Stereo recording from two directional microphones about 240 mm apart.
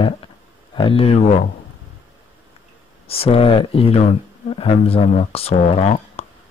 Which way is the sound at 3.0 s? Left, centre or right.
Left.